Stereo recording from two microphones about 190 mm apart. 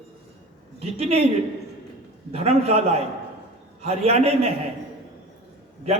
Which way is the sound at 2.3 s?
30° right (ahead or behind).